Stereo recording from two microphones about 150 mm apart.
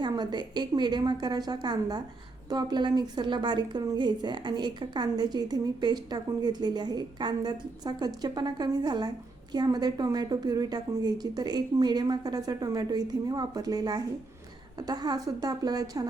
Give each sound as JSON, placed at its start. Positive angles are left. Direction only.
{"t": 0.0, "sound": "a woman's voice", "side_deg": -30}